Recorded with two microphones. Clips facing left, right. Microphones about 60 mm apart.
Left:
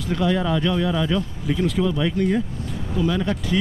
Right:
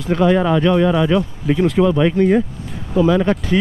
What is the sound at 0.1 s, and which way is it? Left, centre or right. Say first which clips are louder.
Speech: right 7 dB; right.